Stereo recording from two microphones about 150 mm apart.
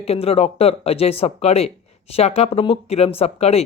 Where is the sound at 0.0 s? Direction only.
40° left (ahead or behind).